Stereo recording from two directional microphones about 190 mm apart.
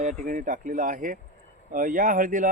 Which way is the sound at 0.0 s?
40° right (ahead or behind).